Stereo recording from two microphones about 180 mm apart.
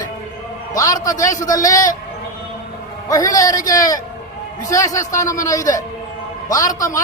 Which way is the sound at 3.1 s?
20° left (ahead or behind).